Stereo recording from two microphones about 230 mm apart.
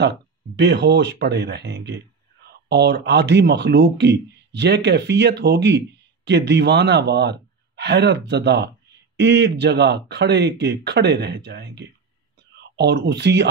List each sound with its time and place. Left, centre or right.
0.0 s speech: right